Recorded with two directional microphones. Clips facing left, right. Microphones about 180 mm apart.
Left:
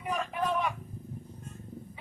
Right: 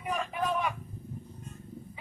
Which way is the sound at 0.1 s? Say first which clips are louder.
Even; centre (ahead or behind).